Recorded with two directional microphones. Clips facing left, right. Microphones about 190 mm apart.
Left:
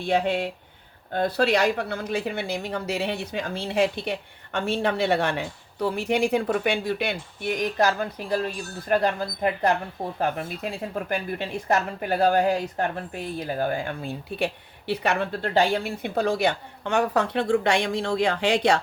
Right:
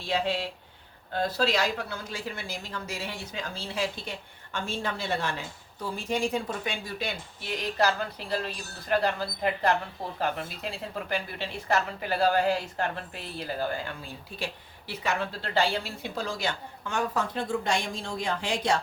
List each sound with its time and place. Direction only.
0.0 s a woman's voice: 55° left (ahead or behind)